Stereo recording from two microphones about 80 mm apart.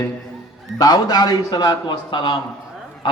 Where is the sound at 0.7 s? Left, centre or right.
Left.